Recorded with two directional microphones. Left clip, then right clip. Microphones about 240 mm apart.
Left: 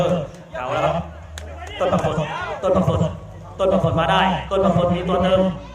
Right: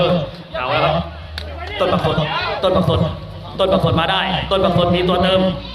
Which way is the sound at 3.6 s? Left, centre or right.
Centre.